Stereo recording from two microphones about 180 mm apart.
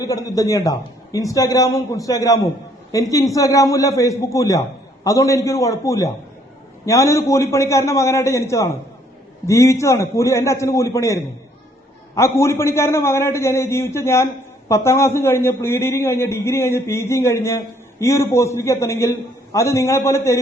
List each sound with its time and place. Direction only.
0.0 s a man's voice: 20° left (ahead or behind)